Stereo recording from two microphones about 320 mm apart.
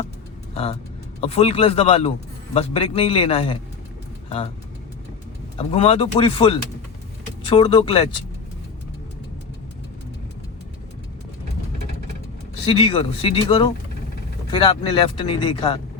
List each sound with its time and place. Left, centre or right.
0.5 s a man's voice: centre
5.5 s a man's voice: centre
12.6 s a man's voice: centre